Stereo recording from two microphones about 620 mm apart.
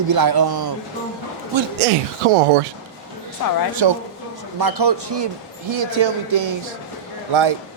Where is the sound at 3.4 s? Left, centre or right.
Left.